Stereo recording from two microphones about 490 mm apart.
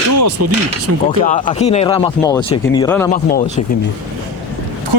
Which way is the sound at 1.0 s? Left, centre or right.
Centre.